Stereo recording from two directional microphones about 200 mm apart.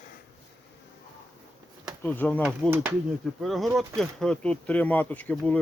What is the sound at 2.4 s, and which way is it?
Speech, 5° right (ahead or behind).